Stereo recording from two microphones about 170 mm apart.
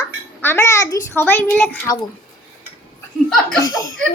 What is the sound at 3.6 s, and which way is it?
Speech, 20° left (ahead or behind).